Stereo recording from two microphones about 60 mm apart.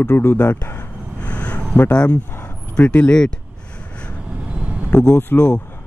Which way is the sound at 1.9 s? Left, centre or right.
Centre.